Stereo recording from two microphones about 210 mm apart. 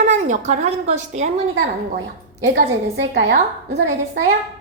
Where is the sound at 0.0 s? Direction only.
35° right (ahead or behind).